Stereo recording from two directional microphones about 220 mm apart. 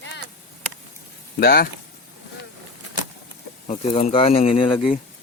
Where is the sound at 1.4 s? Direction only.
45° left (ahead or behind).